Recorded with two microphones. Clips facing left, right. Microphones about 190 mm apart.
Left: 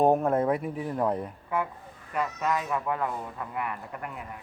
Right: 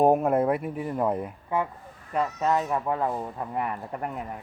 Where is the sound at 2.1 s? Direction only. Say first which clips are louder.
Right 4 dB; 30° right (ahead or behind).